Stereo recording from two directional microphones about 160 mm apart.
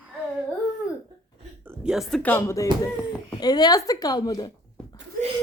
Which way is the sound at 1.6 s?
5° right (ahead or behind).